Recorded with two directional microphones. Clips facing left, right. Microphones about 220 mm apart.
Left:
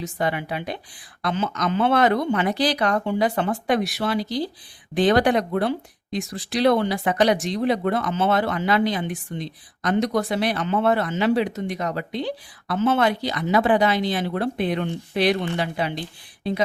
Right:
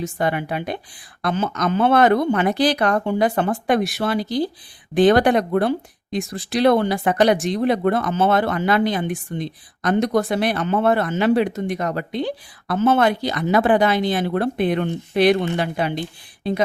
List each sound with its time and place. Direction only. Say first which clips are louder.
0.0 s speech: right 3 dB; 50° right (ahead or behind)